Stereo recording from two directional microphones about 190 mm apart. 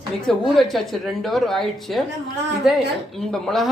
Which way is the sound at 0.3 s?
Centre (ahead or behind).